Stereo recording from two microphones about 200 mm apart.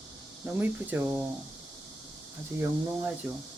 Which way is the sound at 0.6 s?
10° right (ahead or behind).